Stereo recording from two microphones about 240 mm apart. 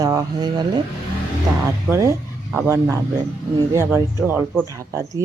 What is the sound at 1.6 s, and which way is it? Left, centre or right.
Speech, centre.